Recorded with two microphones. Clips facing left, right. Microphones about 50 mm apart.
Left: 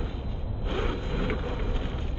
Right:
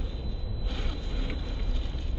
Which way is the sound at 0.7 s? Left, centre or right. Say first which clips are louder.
Left 10 dB; left.